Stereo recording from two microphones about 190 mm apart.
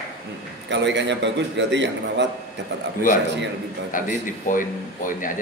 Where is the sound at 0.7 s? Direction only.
70° right (ahead or behind).